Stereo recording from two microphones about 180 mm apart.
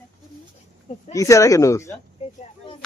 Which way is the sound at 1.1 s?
20° left (ahead or behind).